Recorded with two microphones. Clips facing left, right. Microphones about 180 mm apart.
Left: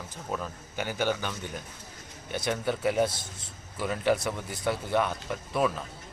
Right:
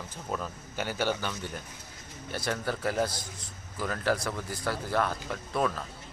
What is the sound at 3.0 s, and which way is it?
Speech, 25° left (ahead or behind).